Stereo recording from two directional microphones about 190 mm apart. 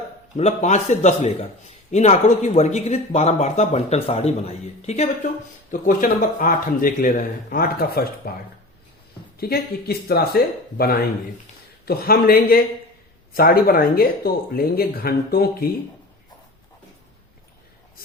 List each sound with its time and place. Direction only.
0.3 s speech: 35° left (ahead or behind)
5.8 s speech: 45° left (ahead or behind)
9.4 s speech: 55° left (ahead or behind)